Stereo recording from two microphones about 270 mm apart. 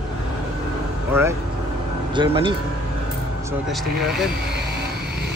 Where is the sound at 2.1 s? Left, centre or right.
Centre.